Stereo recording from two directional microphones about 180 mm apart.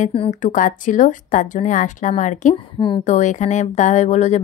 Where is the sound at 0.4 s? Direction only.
45° left (ahead or behind).